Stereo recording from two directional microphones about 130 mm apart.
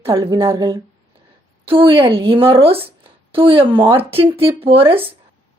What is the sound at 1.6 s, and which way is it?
A woman's voice, 45° right (ahead or behind).